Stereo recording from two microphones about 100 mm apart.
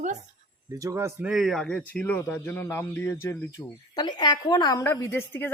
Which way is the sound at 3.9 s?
45° left (ahead or behind).